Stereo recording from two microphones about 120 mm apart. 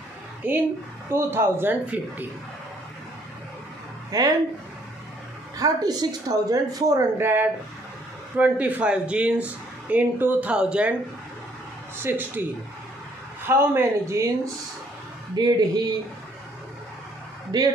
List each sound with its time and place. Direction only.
1.1 s speech: 20° right (ahead or behind)
4.1 s speech: 30° right (ahead or behind)
5.6 s speech: 30° right (ahead or behind)
7.2 s speech: 20° right (ahead or behind)
12.0 s speech: 15° right (ahead or behind)
13.5 s speech: 20° right (ahead or behind)
17.5 s speech: 35° right (ahead or behind)